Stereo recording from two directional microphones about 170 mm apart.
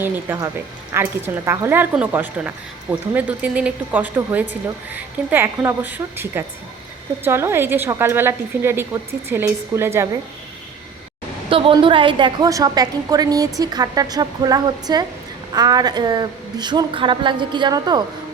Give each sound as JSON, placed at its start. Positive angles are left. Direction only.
{"t": 0.3, "sound": "a woman's voice", "side_deg": -15}
{"t": 11.4, "sound": "a woman's voice", "side_deg": -30}